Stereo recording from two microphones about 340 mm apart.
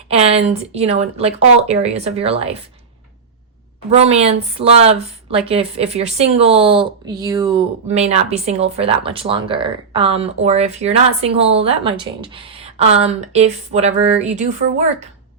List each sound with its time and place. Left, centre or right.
0.1 s speech: centre
3.9 s speech: centre